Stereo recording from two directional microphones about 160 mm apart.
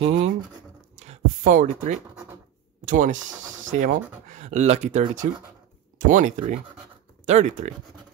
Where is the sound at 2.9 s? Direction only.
50° right (ahead or behind).